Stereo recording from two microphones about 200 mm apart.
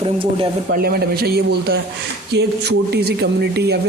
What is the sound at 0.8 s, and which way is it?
A man's voice, 50° right (ahead or behind).